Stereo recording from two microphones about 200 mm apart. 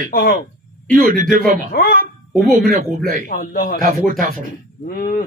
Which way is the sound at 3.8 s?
45° right (ahead or behind).